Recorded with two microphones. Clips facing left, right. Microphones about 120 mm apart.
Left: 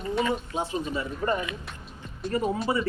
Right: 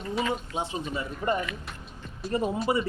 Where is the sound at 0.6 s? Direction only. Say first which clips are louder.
Left 2 dB; 20° right (ahead or behind).